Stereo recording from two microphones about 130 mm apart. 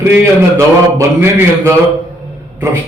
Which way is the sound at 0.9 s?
20° right (ahead or behind).